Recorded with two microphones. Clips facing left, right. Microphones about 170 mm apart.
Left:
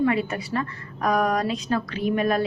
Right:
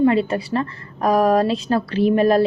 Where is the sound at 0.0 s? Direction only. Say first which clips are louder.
Right 6 dB; 30° right (ahead or behind).